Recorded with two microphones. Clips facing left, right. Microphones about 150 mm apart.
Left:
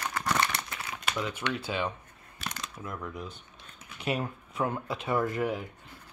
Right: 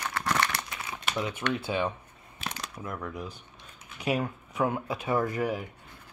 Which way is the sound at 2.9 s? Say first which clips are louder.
Right 2 dB; centre (ahead or behind).